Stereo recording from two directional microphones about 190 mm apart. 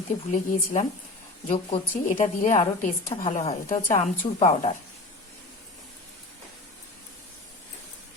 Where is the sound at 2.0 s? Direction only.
40° left (ahead or behind).